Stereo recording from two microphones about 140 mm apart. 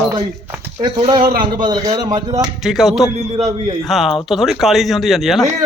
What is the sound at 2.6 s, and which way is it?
Speech, centre (ahead or behind).